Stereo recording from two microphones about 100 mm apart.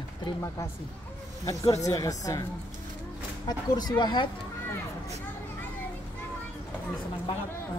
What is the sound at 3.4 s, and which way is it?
Speech, 40° left (ahead or behind).